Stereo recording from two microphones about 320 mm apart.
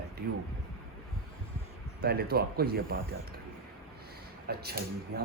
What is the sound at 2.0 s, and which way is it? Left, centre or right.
Speech, right.